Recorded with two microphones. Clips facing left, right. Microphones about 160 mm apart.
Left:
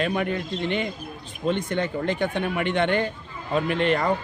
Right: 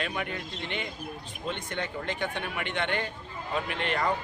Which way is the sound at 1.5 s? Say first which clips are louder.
Left 9 dB; 40° left (ahead or behind).